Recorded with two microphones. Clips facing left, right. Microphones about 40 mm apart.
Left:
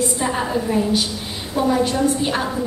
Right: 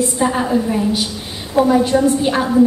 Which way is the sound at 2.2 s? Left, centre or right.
Centre.